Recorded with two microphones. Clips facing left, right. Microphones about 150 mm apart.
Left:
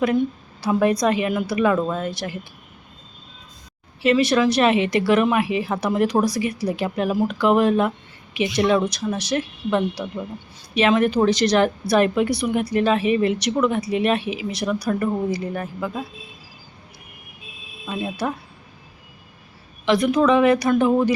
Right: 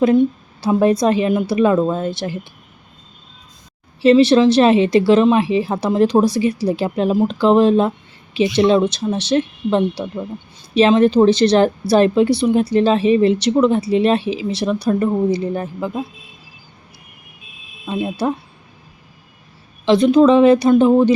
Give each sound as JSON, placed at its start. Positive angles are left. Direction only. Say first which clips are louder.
{"t": 0.6, "sound": "a woman's voice", "louder": "right 4 dB", "side_deg": -30}
{"t": 4.0, "sound": "a woman's voice", "louder": "right 7 dB", "side_deg": -30}
{"t": 18.0, "sound": "a woman's voice", "louder": "right 5 dB", "side_deg": -25}
{"t": 19.8, "sound": "a woman's voice", "louder": "right 6 dB", "side_deg": -25}